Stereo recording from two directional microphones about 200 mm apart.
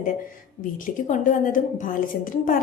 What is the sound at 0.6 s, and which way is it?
A woman's voice, 40° left (ahead or behind).